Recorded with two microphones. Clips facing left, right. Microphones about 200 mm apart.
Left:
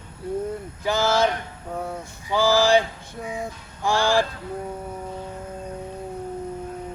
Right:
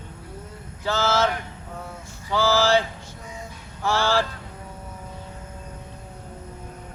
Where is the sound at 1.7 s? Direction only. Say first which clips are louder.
Left 8 dB; 55° left (ahead or behind).